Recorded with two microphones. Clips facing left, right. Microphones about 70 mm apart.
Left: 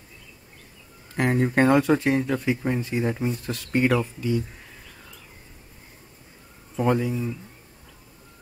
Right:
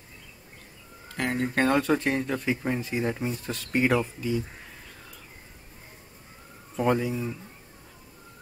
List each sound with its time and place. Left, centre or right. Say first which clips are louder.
1.1 s speech: left 5 dB; left
1.6 s speech: left 4 dB; centre
6.8 s speech: left 2 dB; centre